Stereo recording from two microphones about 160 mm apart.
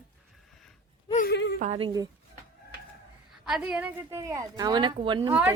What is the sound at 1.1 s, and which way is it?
Speech, 80° left.